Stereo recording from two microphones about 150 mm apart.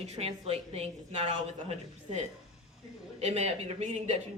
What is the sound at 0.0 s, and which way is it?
A woman's voice, 45° right (ahead or behind).